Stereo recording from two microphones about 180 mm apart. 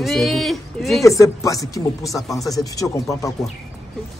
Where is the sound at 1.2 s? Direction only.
20° left (ahead or behind).